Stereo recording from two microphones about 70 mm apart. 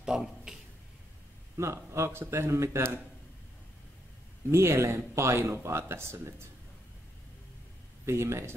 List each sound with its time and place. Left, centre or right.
0.0 s a sound: centre
1.6 s speech: right
4.5 s speech: right
8.0 s speech: right